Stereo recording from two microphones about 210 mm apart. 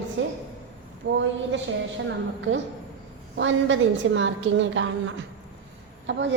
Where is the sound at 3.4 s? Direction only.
65° right (ahead or behind).